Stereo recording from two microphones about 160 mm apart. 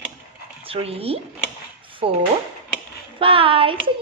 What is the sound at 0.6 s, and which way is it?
A woman's voice, 40° right (ahead or behind).